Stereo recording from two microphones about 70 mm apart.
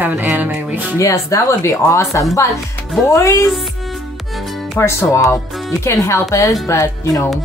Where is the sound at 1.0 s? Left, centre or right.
Left.